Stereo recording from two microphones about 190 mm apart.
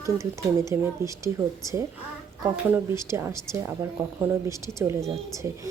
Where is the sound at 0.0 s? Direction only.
15° right (ahead or behind).